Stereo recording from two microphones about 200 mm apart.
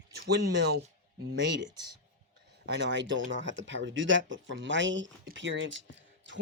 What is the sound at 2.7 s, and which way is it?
Speech, 60° right (ahead or behind).